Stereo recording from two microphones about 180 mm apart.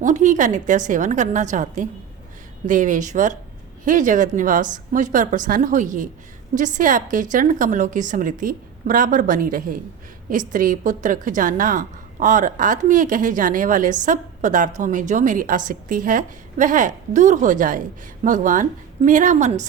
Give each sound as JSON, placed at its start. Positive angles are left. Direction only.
{"t": 0.0, "sound": "a woman's voice", "side_deg": -45}